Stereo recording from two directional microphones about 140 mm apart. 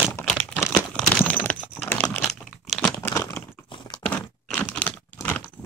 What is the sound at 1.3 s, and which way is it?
Typing, 10° left (ahead or behind).